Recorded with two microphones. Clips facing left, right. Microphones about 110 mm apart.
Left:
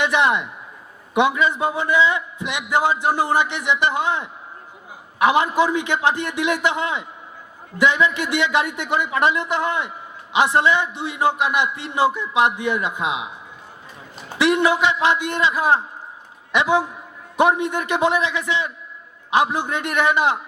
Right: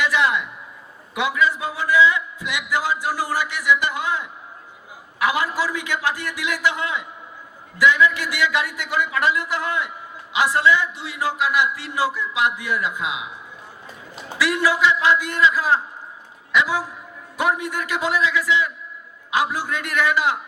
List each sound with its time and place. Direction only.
0.0 s a man's voice: 25° left (ahead or behind)
14.3 s a man's voice: 25° left (ahead or behind)